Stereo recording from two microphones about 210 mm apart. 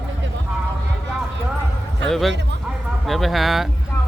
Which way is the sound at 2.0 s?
Centre (ahead or behind).